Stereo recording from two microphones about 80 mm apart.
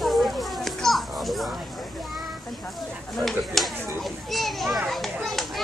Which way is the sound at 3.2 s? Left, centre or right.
Centre.